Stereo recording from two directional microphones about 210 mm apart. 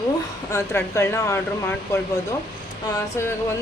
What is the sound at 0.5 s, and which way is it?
Speech, 15° left (ahead or behind).